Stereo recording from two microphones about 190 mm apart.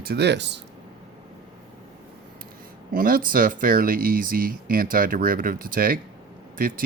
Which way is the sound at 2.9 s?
50° right (ahead or behind).